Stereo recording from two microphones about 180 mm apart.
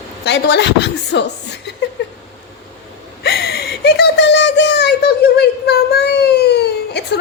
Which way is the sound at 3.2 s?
65° left (ahead or behind).